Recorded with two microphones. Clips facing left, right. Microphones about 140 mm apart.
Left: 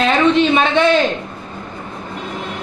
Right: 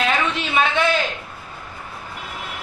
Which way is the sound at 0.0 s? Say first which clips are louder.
Left 8 dB; 30° left (ahead or behind).